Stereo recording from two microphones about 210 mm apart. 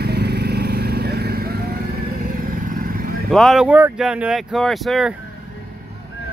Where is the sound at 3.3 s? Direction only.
Centre (ahead or behind).